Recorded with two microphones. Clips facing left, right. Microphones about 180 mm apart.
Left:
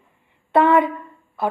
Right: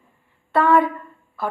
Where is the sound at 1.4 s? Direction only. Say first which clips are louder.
Left 3 dB; 20° left (ahead or behind).